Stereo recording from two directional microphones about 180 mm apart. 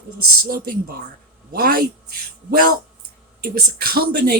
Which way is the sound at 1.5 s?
55° right (ahead or behind).